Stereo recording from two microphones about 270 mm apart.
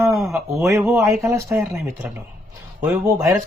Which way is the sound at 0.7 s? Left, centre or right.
Centre.